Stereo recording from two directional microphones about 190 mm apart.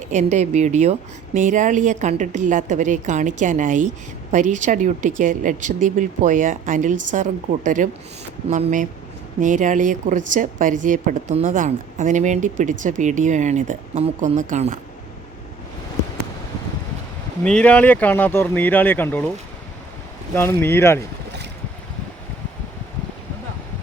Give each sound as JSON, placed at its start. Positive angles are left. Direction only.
{"t": 0.1, "sound": "speech", "side_deg": -40}
{"t": 17.4, "sound": "speech", "side_deg": 5}
{"t": 20.3, "sound": "speech", "side_deg": 10}